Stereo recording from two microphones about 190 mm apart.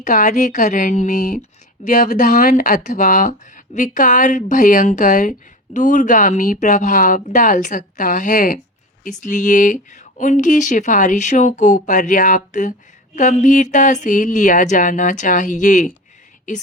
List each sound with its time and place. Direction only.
0.0 s speech: 40° left (ahead or behind)